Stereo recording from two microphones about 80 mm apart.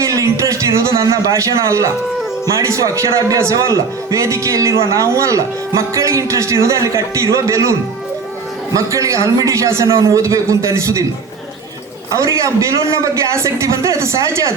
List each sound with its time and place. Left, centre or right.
0.0 s a man's voice: right
12.1 s a man's voice: right